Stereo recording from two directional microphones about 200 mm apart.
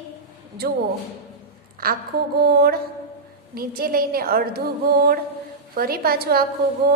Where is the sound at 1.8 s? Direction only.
50° right (ahead or behind).